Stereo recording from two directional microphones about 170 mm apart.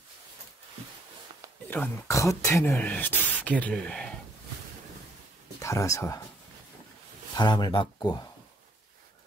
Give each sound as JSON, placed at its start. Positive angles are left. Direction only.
{"t": 1.7, "sound": "speech", "side_deg": 15}
{"t": 5.6, "sound": "speech", "side_deg": 20}
{"t": 7.3, "sound": "speech", "side_deg": 25}